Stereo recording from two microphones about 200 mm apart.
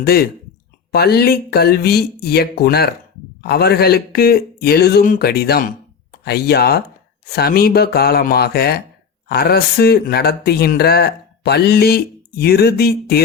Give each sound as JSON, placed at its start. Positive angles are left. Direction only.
{"t": 0.0, "sound": "speech", "side_deg": 50}